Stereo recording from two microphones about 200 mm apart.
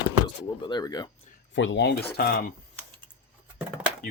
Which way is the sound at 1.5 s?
65° left (ahead or behind).